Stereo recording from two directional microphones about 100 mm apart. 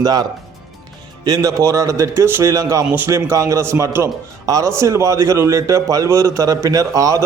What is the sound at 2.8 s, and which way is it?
Speech, 20° right (ahead or behind).